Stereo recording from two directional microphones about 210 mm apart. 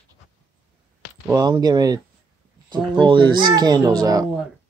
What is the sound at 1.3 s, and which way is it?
A child's voice, 20° right (ahead or behind).